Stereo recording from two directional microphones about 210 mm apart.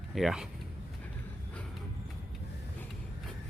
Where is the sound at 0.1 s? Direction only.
Centre (ahead or behind).